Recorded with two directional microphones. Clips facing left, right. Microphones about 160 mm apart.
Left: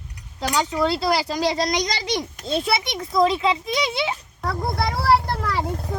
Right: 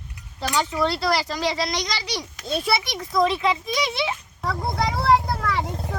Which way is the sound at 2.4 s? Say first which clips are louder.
Right 1 dB; 25° left (ahead or behind).